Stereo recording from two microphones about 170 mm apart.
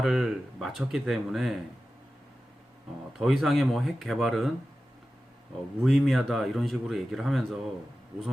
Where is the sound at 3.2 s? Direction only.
Centre (ahead or behind).